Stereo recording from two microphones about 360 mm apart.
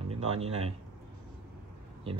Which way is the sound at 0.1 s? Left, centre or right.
Centre.